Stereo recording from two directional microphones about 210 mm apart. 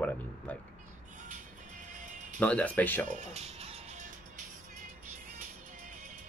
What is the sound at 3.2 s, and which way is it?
Music, 30° right (ahead or behind).